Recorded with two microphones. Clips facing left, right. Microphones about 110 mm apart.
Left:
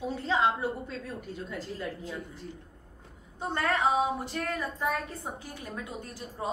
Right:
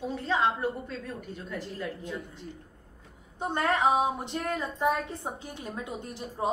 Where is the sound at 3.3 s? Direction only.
20° right (ahead or behind).